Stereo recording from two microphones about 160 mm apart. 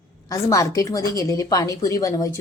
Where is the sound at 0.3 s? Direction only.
20° left (ahead or behind).